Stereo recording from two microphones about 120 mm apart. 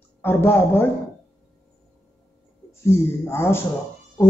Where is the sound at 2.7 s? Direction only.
20° left (ahead or behind).